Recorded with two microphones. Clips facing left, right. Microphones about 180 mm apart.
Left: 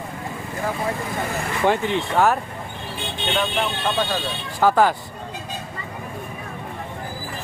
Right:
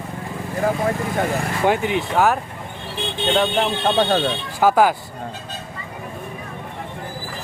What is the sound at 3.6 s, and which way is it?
Speech, 45° right (ahead or behind).